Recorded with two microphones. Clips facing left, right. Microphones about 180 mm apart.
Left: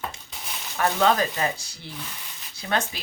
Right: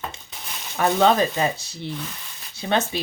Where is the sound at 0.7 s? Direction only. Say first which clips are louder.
Right 3 dB; 20° right (ahead or behind).